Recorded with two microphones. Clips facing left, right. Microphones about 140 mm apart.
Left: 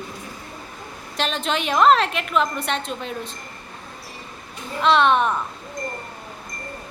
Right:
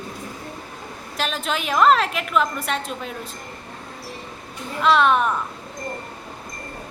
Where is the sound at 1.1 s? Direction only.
5° right (ahead or behind).